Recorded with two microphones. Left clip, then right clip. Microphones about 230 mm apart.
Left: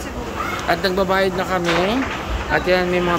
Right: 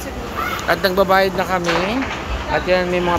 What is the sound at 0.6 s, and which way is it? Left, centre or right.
Speech, centre.